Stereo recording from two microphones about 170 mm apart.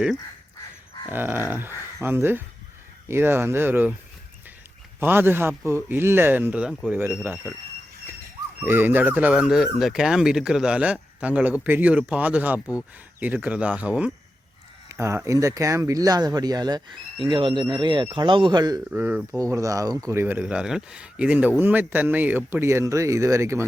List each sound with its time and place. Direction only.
1.1 s speech: 10° right (ahead or behind)
4.9 s speech: 10° right (ahead or behind)
8.6 s speech: 10° right (ahead or behind)
18.9 s speech: 10° right (ahead or behind)